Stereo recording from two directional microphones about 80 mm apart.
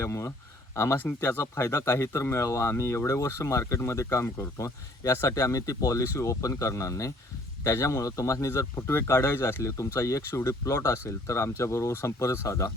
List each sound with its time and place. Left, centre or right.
0.0 s speech: left
0.9 s speech: left